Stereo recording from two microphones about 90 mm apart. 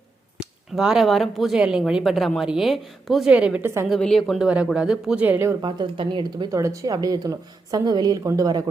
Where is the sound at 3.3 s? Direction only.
15° right (ahead or behind).